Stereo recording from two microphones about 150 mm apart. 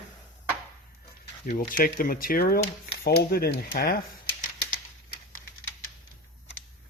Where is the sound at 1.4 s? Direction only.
60° left (ahead or behind); by 4.0 s 90° left.